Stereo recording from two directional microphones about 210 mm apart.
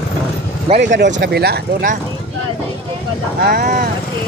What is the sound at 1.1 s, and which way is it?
Speech, 50° right (ahead or behind).